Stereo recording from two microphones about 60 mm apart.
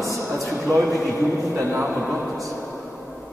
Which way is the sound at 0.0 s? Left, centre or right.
Right.